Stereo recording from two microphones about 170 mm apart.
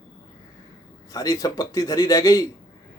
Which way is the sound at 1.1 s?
20° left (ahead or behind).